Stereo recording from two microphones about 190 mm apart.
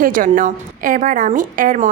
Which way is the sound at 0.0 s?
45° right (ahead or behind).